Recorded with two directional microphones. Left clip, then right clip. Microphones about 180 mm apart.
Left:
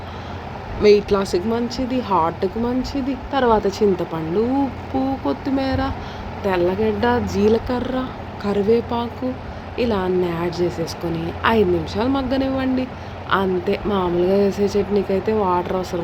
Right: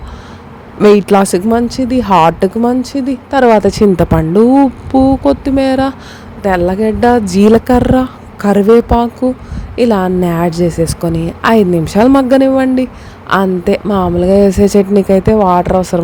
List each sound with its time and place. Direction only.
0.8 s a woman's voice: 65° right (ahead or behind)
4.9 s a sound: 50° right (ahead or behind)
6.4 s a woman's voice: 55° right (ahead or behind)